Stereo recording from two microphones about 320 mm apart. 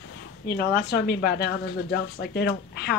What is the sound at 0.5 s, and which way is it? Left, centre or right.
A woman's voice, left.